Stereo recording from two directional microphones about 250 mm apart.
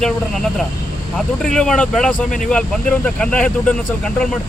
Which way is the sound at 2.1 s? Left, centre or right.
Left.